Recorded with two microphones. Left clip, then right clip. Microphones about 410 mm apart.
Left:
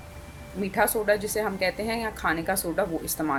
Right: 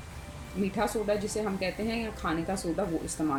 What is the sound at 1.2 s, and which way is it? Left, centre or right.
A woman's voice, centre.